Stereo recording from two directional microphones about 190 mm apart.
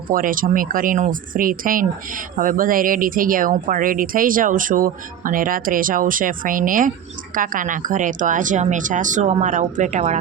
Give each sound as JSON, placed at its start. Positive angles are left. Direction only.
{"t": 0.1, "sound": "speech", "side_deg": -45}